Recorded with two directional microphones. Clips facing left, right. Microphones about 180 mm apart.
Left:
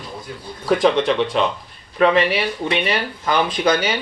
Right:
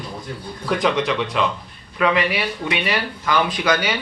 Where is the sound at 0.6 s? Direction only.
30° left (ahead or behind).